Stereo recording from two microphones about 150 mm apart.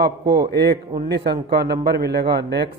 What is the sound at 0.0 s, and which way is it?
A man's voice, 90° right.